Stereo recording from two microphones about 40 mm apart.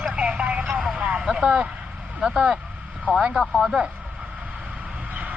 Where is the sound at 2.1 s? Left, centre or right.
Right.